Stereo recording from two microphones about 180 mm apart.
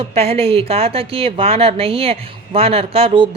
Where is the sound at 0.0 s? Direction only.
35° right (ahead or behind).